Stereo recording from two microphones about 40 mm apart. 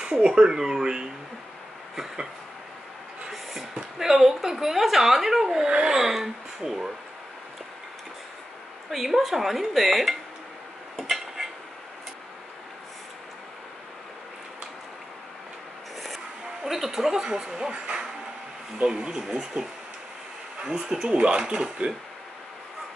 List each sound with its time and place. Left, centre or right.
0.0 s speech: right
3.3 s a woman's voice: centre
5.7 s speech: right
5.9 s a woman's voice: centre
8.9 s speech: centre
11.0 s dishes: centre
16.6 s a woman's voice: centre; by 21.9 s right